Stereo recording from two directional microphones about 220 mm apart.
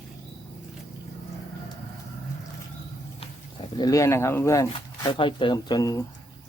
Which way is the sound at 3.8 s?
15° left (ahead or behind).